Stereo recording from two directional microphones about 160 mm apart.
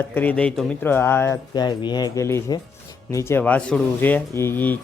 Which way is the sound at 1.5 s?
25° left (ahead or behind).